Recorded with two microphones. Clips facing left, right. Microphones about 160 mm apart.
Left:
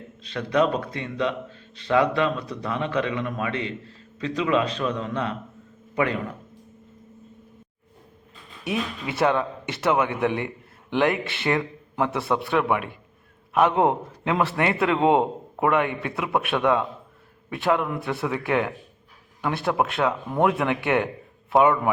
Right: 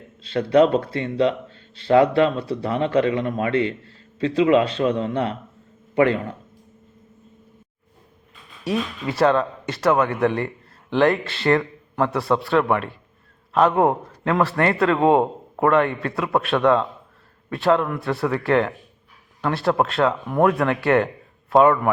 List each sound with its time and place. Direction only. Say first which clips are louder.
0.2 s a man's voice: right 6 dB; 30° right (ahead or behind)
8.6 s speech: right 4 dB; 15° left (ahead or behind)
18.1 s a man's voice: right 5 dB; 5° left (ahead or behind)